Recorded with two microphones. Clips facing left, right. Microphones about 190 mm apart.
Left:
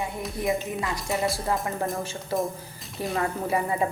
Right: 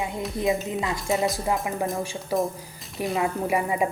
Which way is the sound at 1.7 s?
5° right (ahead or behind).